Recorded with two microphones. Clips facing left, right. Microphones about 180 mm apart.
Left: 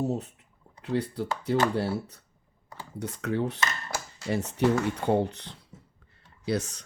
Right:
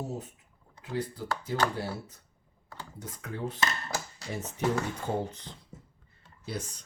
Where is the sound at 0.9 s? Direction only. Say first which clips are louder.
Left 5 dB; 65° left (ahead or behind).